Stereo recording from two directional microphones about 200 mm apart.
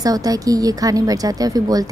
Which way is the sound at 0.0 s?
20° right (ahead or behind).